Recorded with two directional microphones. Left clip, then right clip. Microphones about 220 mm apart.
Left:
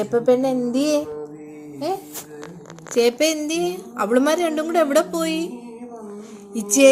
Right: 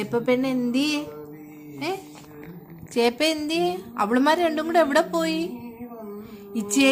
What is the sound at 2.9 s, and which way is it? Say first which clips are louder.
A woman's voice: left 4 dB; 25° right (ahead or behind).